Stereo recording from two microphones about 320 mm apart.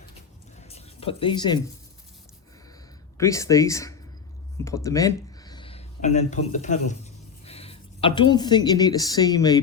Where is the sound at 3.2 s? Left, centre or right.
Centre.